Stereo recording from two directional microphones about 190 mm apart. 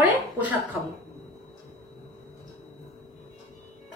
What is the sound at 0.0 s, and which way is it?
Speech, 10° right (ahead or behind).